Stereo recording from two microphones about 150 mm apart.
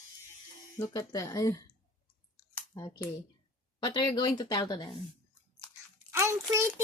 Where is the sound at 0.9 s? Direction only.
25° left (ahead or behind).